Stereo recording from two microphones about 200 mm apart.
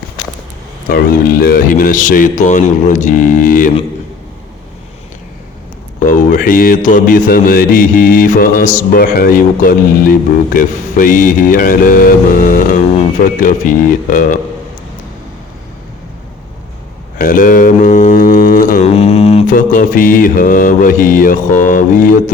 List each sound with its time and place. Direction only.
0.9 s mantra: 50° left (ahead or behind)
6.0 s speech: 40° left (ahead or behind)
13.4 s mantra: 40° left (ahead or behind)
17.2 s mantra: 45° left (ahead or behind)
18.9 s mantra: 30° left (ahead or behind)